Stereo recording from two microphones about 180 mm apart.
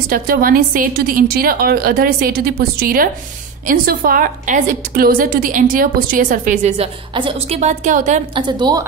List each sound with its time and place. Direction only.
0.1 s a woman's voice: 55° right (ahead or behind)
8.4 s a woman's voice: 25° right (ahead or behind)